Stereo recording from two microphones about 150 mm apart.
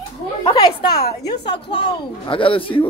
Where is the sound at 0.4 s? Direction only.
30° left (ahead or behind).